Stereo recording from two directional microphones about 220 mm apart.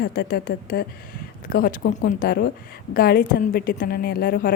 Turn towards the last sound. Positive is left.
turn(degrees=40)  # may be behind; listen again after turning